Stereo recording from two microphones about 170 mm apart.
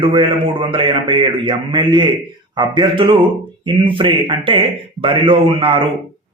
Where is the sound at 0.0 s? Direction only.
30° right (ahead or behind).